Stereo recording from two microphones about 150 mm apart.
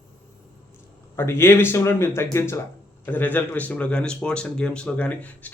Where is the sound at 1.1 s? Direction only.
15° left (ahead or behind).